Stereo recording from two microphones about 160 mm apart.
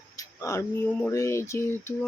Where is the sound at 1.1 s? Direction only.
15° left (ahead or behind).